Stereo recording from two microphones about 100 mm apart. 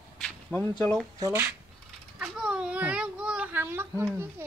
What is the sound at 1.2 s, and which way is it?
Speech, 25° right (ahead or behind).